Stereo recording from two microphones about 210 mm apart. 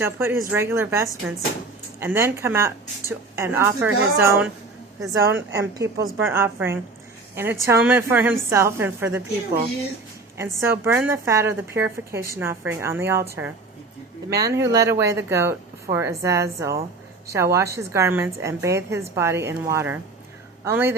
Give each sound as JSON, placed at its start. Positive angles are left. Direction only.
{"t": 0.0, "sound": "a woman's voice", "side_deg": -10}